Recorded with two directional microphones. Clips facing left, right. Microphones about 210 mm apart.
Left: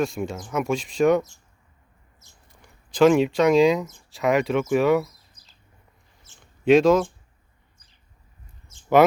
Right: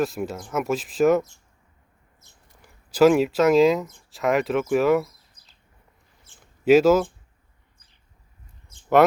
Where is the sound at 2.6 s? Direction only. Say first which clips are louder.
Right 1 dB; 5° right (ahead or behind).